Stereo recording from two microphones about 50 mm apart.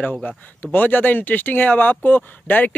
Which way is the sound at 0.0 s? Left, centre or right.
Left.